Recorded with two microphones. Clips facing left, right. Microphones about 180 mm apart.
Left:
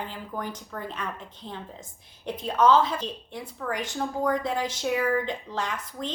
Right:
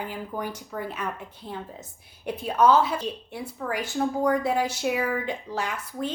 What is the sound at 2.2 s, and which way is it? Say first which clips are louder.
A woman's voice: right 1 dB; 10° right (ahead or behind).